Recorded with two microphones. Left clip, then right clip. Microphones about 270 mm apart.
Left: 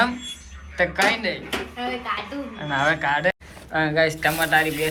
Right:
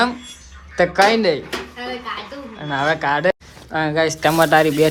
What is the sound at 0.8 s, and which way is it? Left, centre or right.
Speech, right.